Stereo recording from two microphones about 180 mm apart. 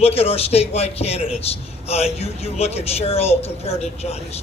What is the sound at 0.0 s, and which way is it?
A man's voice, 35° left (ahead or behind).